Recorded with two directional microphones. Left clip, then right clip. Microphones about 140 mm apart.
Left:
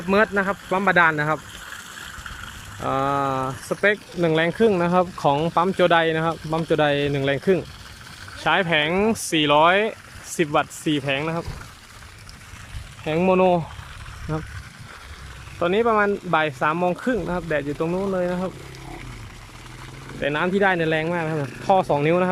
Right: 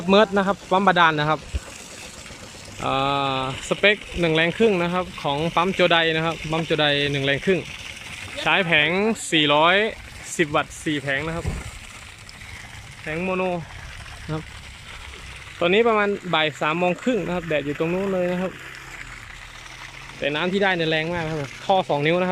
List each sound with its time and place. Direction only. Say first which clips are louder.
0.1 s speech: right 2 dB; 5° right (ahead or behind)
2.8 s speech: even; centre (ahead or behind)
3.3 s speech: right 1 dB; 15° right (ahead or behind)
4.2 s speech: left 1 dB; 5° left (ahead or behind)
4.9 s speech: left 5 dB; 15° left (ahead or behind)
5.7 s speech: even; 5° left (ahead or behind)
13.1 s speech: left 7 dB; 25° left (ahead or behind)
14.3 s speech: left 2 dB; 35° right (ahead or behind)
15.5 s speech: right 1 dB; centre (ahead or behind)
20.1 s speech: left 1 dB; 5° left (ahead or behind)